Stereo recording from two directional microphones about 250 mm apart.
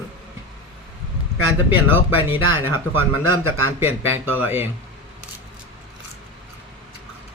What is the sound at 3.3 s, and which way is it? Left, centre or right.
Speech, right.